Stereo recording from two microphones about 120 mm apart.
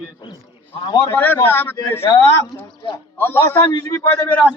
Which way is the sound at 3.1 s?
20° left (ahead or behind).